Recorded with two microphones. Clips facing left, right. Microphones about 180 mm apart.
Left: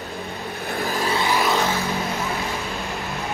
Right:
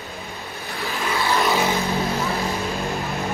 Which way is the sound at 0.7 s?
35° left (ahead or behind).